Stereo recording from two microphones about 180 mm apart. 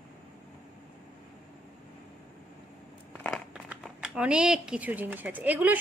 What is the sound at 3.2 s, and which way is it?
Crumpling, centre (ahead or behind).